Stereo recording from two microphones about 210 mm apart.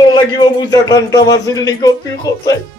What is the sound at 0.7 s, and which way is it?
Speech, 15° left (ahead or behind).